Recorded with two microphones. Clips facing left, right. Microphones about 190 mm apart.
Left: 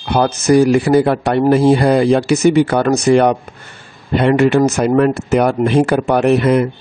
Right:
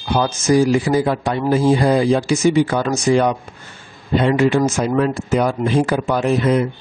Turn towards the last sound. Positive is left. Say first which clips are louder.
# left 4 dB
turn(degrees=65)  # may be behind; listen again after turning